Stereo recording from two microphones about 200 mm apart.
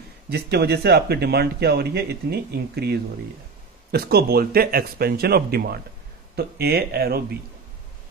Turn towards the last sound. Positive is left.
turn(degrees=-50)  # may be behind; listen again after turning